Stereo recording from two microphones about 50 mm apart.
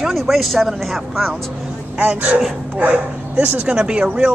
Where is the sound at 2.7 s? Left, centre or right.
Right.